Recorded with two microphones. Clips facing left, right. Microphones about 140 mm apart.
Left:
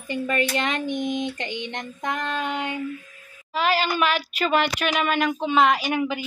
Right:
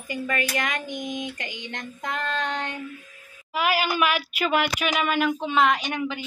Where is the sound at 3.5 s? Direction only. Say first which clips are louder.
Left 1 dB; 10° right (ahead or behind).